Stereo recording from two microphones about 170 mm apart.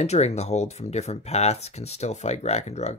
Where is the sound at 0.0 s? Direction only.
40° left (ahead or behind).